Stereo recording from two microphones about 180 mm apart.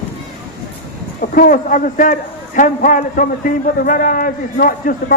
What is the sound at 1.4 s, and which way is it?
A man's voice, 50° left (ahead or behind).